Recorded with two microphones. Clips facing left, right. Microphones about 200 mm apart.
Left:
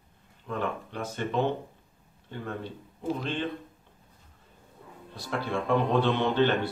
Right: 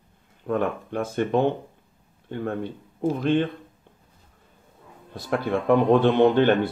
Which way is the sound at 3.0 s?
50° right (ahead or behind).